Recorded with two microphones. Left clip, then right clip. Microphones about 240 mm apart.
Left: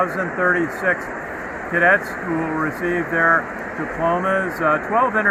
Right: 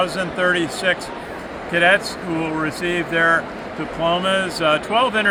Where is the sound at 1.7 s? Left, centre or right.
Centre.